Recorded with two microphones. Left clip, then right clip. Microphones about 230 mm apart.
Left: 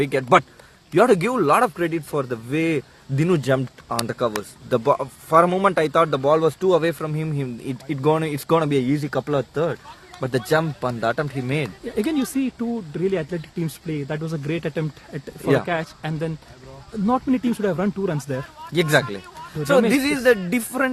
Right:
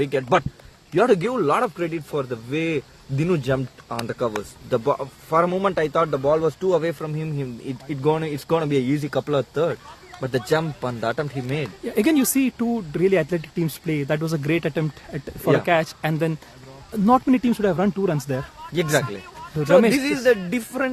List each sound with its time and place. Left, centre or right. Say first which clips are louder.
0.0 s speech: left 3 dB; left
11.9 s speech: right 4 dB; right
18.7 s speech: left 3 dB; left